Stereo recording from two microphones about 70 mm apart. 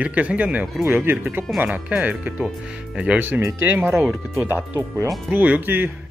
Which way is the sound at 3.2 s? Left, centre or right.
Right.